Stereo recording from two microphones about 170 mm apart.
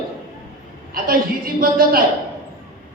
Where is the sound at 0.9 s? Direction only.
55° right (ahead or behind).